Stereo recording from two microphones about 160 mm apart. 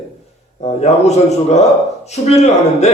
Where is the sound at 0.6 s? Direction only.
45° left (ahead or behind).